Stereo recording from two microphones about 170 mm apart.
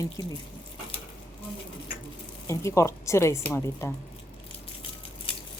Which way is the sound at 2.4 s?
15° left (ahead or behind).